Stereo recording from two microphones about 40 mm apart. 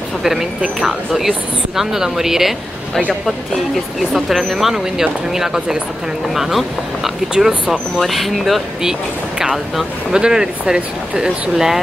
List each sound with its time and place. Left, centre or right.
0.2 s speech: centre
4.1 s speech: centre
7.3 s speech: centre
8.1 s speech: centre
9.4 s speech: centre
11.5 s speech: centre